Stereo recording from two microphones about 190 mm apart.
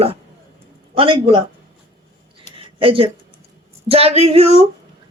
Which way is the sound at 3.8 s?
30° right (ahead or behind).